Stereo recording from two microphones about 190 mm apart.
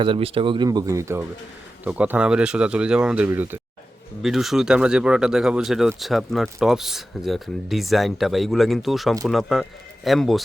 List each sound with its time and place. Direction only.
0.0 s speech: 30° right (ahead or behind); by 10.4 s centre (ahead or behind)